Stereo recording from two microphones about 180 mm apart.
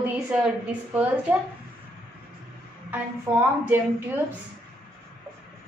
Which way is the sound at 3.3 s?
15° right (ahead or behind).